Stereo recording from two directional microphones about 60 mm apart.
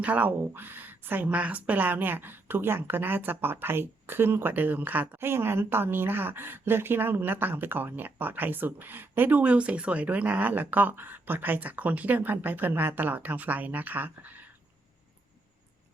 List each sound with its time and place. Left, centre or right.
0.0 s speech: right
1.3 s speech: right
9.5 s speech: centre